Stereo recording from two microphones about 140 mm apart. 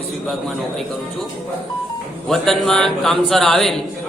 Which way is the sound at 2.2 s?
5° left (ahead or behind).